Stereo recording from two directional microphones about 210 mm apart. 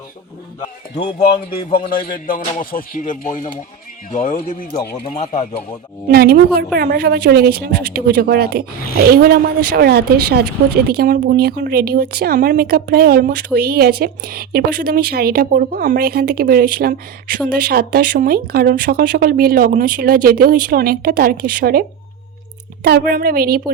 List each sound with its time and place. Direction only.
2.1 s speech: 40° left (ahead or behind)
5.0 s speech: 30° left (ahead or behind)
6.1 s speech: 45° right (ahead or behind)
9.6 s speech: 50° right (ahead or behind)